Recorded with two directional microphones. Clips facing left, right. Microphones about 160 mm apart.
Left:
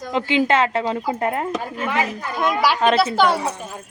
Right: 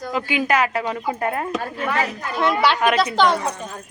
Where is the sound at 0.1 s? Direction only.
25° left (ahead or behind); by 3.7 s 5° left (ahead or behind).